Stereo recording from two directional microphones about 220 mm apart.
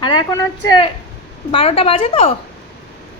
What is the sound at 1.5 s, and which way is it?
Speech, 25° left (ahead or behind).